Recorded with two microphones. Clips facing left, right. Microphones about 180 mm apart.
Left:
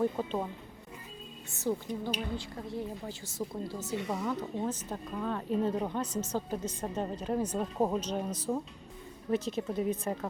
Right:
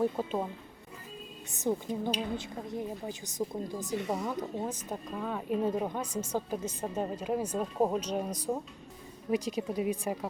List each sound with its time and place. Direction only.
0.0 s speech: 10° right (ahead or behind)
1.7 s a woman's voice: 20° right (ahead or behind)